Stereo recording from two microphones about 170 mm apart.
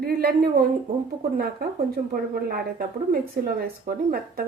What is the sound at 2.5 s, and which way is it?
Speech, 60° right (ahead or behind).